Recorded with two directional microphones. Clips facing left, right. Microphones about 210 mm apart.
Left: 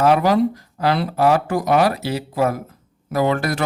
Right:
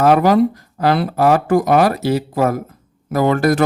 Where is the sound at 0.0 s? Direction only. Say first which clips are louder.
Right 3 dB; 50° right (ahead or behind).